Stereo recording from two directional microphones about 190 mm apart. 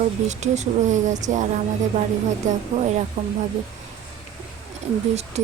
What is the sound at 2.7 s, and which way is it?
Speech, 40° right (ahead or behind).